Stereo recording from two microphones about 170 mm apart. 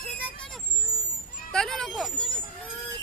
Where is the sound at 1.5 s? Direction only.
5° left (ahead or behind).